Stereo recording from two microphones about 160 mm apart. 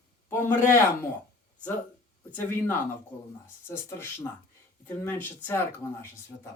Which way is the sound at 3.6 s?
15° left (ahead or behind).